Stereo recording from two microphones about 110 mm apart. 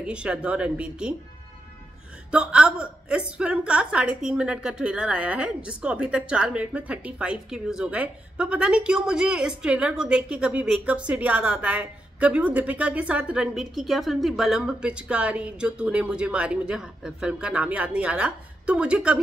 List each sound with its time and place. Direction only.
0.0 s a woman's voice: 10° right (ahead or behind)
2.3 s a woman's voice: 10° right (ahead or behind)